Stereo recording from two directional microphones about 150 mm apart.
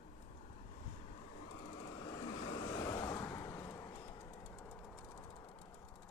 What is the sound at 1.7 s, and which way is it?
Vehicle, 30° left (ahead or behind).